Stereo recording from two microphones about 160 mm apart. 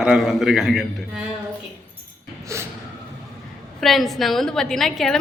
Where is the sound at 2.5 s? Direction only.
20° right (ahead or behind).